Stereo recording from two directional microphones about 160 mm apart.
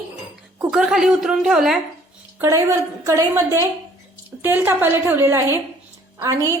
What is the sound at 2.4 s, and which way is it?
A woman's voice, 20° right (ahead or behind).